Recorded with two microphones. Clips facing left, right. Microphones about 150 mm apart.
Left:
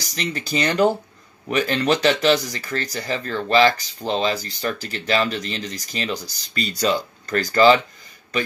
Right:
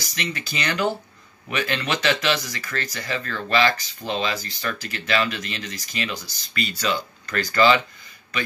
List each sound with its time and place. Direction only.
0.0 s speech: 35° left (ahead or behind)